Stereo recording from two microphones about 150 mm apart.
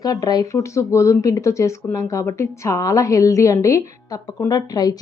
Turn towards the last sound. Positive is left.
turn(degrees=25)  # may be behind; listen again after turning